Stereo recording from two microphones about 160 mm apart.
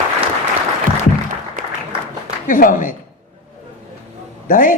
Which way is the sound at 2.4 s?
55° left (ahead or behind).